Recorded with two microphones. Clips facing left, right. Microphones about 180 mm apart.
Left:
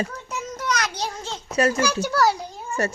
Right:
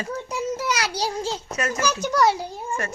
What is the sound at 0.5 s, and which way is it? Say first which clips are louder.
Child singing: left 2 dB; 10° right (ahead or behind).